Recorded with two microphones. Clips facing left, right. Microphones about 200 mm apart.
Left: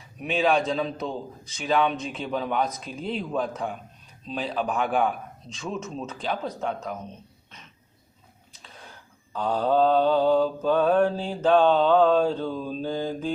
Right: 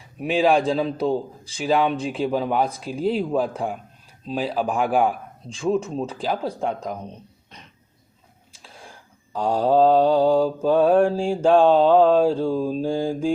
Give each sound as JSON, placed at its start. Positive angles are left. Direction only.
{"t": 0.2, "sound": "speech", "side_deg": -30}
{"t": 3.6, "sound": "mantra", "side_deg": -10}
{"t": 5.0, "sound": "speech", "side_deg": -30}
{"t": 9.4, "sound": "mantra", "side_deg": -10}